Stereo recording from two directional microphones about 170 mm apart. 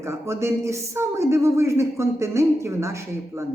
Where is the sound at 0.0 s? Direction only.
15° right (ahead or behind).